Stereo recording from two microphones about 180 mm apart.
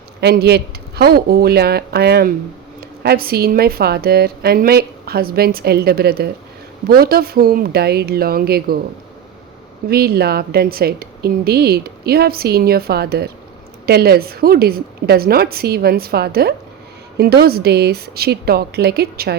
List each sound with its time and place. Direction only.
0.2 s a woman's voice: 65° right (ahead or behind)
9.9 s a woman's voice: 60° right (ahead or behind)